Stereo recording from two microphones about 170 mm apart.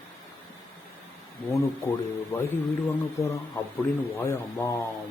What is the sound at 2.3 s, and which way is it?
Speech, 15° left (ahead or behind).